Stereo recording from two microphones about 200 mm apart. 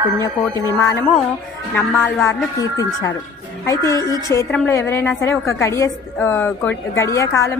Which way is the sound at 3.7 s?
15° left (ahead or behind).